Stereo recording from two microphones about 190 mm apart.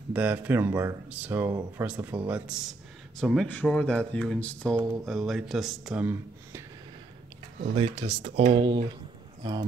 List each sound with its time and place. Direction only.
0.1 s speech: 10° right (ahead or behind)
7.7 s speech: 30° right (ahead or behind)